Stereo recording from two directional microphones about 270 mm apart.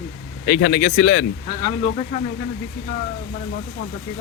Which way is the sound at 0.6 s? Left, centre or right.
Left.